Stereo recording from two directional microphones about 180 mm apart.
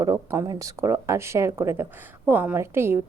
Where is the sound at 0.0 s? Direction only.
15° right (ahead or behind).